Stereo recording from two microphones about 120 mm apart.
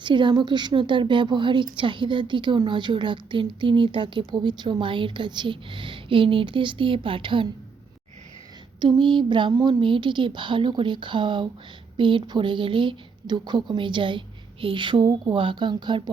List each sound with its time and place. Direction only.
0.0 s a woman's voice: 40° right (ahead or behind)
8.8 s a woman's voice: 40° right (ahead or behind)
9.5 s a woman's voice: 30° right (ahead or behind)
9.8 s a woman's voice: 40° right (ahead or behind)